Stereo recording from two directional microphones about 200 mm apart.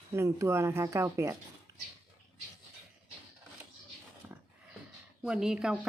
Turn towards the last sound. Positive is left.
turn(degrees=-5)  # may be behind; listen again after turning